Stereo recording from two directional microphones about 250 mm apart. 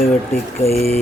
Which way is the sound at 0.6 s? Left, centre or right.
Left.